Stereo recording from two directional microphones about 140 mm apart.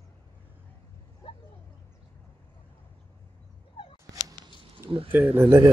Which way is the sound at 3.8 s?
40° left (ahead or behind).